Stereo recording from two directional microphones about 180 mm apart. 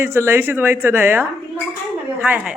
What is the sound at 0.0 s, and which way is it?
Speech, 15° right (ahead or behind).